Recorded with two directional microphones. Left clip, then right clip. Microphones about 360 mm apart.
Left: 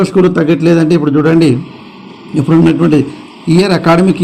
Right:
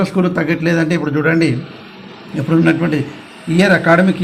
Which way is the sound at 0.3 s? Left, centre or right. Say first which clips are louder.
Left 6 dB; centre.